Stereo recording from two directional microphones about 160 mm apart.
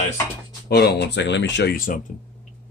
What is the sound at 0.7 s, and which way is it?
Speech, 90° left.